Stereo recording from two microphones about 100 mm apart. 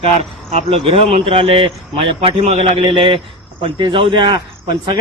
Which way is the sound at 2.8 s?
60° right (ahead or behind).